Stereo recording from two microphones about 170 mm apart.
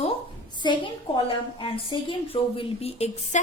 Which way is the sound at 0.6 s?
25° left (ahead or behind).